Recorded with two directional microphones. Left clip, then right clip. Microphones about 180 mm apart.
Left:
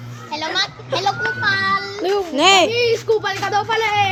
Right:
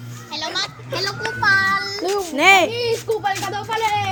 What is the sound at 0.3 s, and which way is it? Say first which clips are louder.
Children playing: left 3 dB; 35° left (ahead or behind).